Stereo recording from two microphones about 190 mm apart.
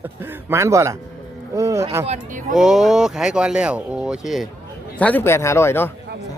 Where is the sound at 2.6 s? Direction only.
5° right (ahead or behind).